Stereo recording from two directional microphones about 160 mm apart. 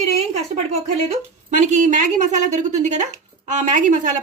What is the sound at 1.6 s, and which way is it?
A woman's voice, 50° right (ahead or behind).